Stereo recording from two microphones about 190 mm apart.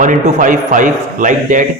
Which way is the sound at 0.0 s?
40° right (ahead or behind).